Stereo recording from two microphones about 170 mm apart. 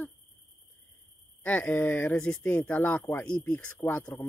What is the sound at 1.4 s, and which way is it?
Speech, 10° left (ahead or behind).